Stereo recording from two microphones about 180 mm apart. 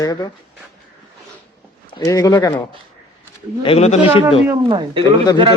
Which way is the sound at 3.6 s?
35° left (ahead or behind).